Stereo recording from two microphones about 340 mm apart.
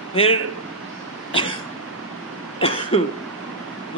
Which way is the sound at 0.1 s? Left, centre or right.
Centre.